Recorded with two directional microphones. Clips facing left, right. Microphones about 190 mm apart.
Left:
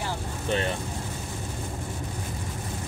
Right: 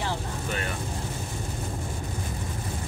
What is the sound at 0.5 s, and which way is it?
Speech, 25° left (ahead or behind).